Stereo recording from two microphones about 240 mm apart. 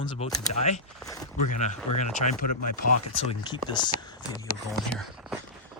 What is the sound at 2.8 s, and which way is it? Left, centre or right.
Speech, left.